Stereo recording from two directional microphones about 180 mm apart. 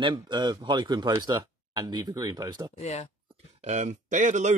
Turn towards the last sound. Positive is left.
turn(degrees=-40)  # may be behind; listen again after turning